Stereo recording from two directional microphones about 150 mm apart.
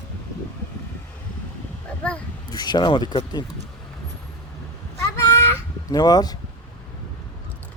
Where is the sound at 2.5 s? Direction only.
25° left (ahead or behind).